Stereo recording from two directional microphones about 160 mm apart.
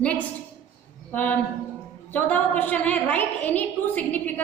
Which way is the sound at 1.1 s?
10° left (ahead or behind).